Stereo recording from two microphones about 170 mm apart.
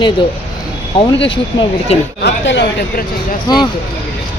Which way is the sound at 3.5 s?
25° left (ahead or behind).